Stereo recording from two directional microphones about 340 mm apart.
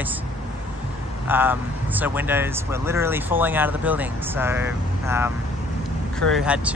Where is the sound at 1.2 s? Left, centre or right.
Centre.